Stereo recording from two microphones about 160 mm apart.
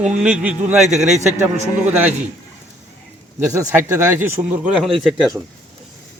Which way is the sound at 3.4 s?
15° right (ahead or behind).